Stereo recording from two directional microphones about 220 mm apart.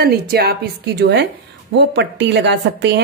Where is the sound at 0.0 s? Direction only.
45° right (ahead or behind).